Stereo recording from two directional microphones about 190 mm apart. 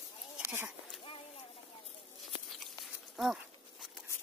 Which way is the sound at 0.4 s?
10° right (ahead or behind).